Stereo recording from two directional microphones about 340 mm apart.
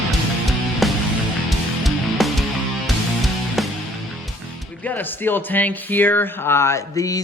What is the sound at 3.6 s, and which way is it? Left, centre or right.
Music, centre.